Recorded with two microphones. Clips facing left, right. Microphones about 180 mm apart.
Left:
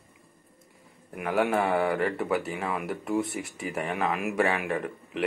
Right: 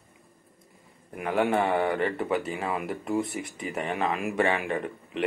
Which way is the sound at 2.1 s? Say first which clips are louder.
Even; 5° left (ahead or behind).